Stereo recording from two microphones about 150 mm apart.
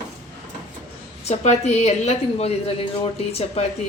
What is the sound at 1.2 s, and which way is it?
A woman's voice, 45° left (ahead or behind).